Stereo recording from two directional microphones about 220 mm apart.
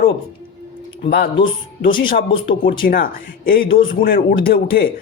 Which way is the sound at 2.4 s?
40° left (ahead or behind).